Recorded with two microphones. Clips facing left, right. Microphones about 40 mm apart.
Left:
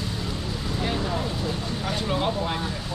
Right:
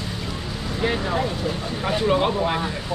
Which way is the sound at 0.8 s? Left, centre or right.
Right.